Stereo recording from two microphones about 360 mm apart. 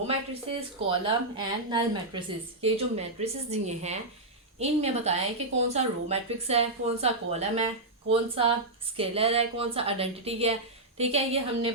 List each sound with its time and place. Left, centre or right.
0.9 s a woman's voice: centre